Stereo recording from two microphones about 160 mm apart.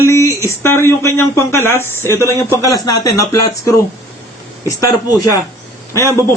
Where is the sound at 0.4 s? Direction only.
15° left (ahead or behind).